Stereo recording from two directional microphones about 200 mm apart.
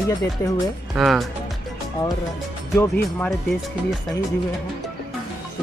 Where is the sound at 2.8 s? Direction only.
10° left (ahead or behind).